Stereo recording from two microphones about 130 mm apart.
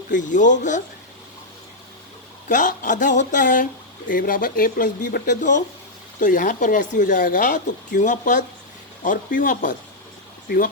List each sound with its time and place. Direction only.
0.1 s speech: 75° left (ahead or behind)
2.5 s speech: 85° left
6.1 s speech: 90° left